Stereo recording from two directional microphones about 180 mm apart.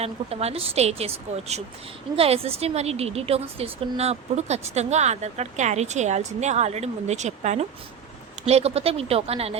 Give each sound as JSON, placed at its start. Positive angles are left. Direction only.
{"t": 0.0, "sound": "a woman's voice", "side_deg": -35}